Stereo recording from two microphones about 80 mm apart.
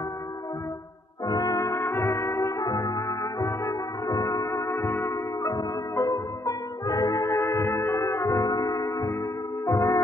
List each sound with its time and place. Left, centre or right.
1.2 s brass instrument: left
2.6 s brass instrument: left
9.7 s music: left